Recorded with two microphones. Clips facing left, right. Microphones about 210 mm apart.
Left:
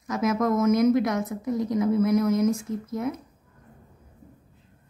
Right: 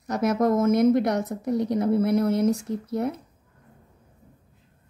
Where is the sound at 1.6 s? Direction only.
70° right (ahead or behind).